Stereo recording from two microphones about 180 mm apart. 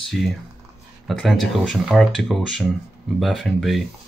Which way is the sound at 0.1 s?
Centre (ahead or behind).